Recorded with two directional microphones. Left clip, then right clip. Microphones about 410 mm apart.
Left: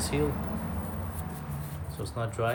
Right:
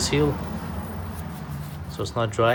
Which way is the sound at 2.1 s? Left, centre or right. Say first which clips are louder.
Right 9 dB; centre.